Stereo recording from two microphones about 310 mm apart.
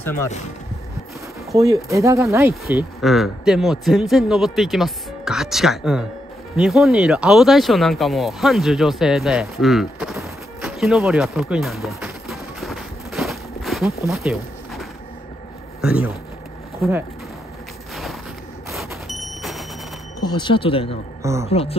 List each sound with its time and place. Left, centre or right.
1.5 s speech: centre
14.0 s a sound: centre
15.8 s speech: centre
18.7 s smoke detector: centre
20.2 s speech: centre
21.2 s speech: centre
21.5 s speech: centre